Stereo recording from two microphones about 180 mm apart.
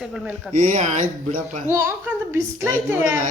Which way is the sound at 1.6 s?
15° right (ahead or behind).